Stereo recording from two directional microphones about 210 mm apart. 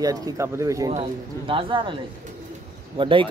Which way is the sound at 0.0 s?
15° right (ahead or behind).